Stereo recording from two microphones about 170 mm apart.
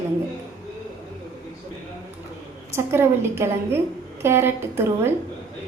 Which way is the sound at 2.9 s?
15° right (ahead or behind).